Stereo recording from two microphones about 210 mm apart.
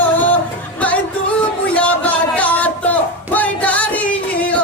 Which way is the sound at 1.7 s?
5° left (ahead or behind).